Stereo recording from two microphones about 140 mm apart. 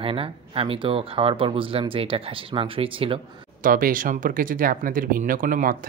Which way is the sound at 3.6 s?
80° right.